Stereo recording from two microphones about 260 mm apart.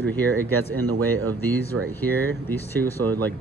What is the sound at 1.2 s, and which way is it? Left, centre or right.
Speech, centre.